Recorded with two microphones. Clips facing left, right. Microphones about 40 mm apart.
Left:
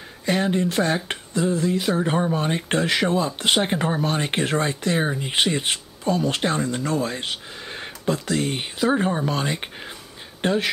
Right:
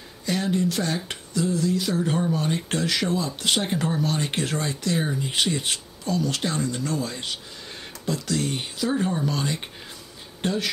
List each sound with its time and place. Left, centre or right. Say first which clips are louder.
0.2 s speech: left 3 dB; left